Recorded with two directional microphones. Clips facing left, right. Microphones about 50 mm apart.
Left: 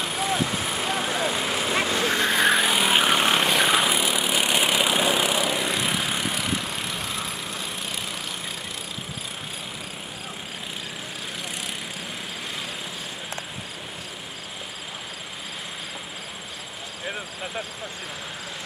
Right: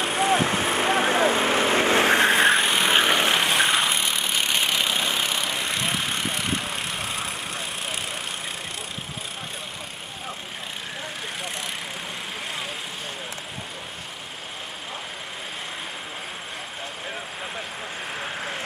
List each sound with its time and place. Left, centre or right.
0.0 s vehicle: right
2.5 s vehicle: centre